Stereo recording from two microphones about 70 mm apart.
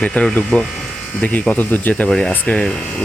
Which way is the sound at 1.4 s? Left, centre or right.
Left.